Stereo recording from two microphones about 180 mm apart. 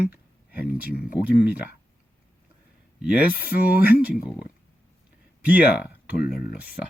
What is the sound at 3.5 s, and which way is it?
Speech, 55° left (ahead or behind).